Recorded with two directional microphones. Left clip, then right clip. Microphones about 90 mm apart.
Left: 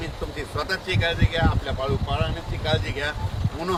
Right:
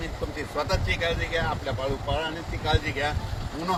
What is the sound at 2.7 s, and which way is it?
Speech, 25° left (ahead or behind).